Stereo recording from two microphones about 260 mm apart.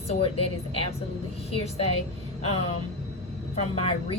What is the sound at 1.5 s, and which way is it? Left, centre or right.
Speech, left.